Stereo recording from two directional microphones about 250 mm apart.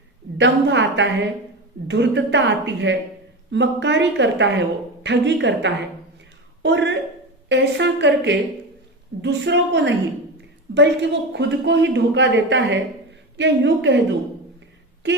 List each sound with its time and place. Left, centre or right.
0.3 s a woman's voice: right